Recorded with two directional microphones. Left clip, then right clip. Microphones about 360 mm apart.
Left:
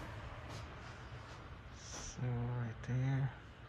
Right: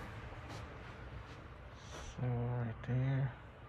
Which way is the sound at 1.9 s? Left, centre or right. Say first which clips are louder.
Right 1 dB; centre.